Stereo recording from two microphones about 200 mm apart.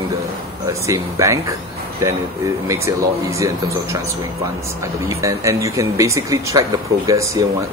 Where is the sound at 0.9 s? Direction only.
15° right (ahead or behind).